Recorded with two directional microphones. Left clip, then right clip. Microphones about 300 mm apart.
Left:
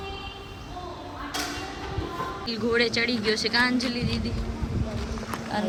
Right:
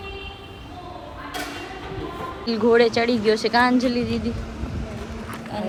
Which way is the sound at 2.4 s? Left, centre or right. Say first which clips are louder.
Right 8 dB; centre.